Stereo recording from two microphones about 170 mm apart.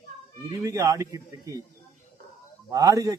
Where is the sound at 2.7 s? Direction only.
20° right (ahead or behind).